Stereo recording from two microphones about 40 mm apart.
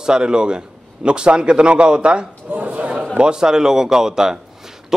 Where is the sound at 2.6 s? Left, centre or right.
Right.